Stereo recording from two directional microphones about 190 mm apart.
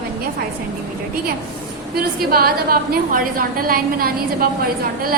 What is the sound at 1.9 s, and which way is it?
A woman's voice, 50° right (ahead or behind).